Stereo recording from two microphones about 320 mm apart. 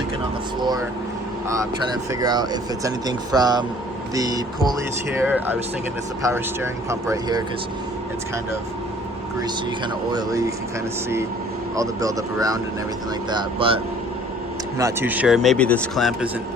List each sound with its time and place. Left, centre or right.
2.2 s a man's voice: centre
10.1 s speech: centre
11.8 s speech: centre
14.8 s a man's voice: centre